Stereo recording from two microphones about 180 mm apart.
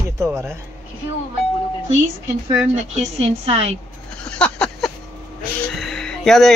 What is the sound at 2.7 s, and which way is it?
Speech, 35° right (ahead or behind).